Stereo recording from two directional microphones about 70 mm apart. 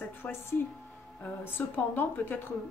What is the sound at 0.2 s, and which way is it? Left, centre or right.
A woman's voice, left.